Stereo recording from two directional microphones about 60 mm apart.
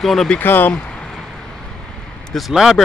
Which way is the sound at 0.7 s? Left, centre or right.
Centre.